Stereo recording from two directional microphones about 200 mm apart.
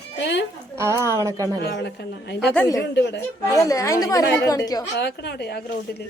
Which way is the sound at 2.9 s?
60° left (ahead or behind).